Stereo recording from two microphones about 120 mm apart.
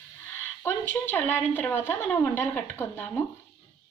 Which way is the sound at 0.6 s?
20° left (ahead or behind).